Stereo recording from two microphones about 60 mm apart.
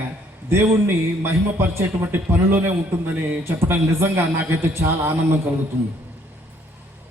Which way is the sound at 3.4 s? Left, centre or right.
Right.